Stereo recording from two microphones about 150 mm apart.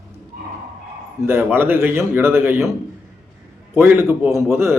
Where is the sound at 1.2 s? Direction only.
15° right (ahead or behind).